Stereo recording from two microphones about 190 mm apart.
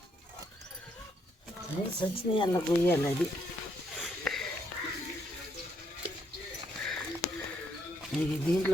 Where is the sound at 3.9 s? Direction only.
Centre (ahead or behind).